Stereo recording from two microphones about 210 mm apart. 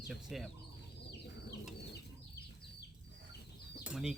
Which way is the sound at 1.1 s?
50° left (ahead or behind).